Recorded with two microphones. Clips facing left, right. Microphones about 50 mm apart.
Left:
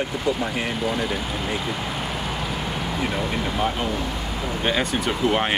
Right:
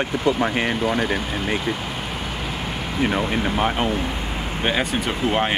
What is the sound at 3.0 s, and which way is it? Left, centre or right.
Speech, right.